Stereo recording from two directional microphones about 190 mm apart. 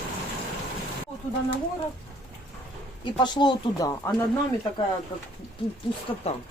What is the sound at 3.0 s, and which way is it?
Speech, 25° left (ahead or behind).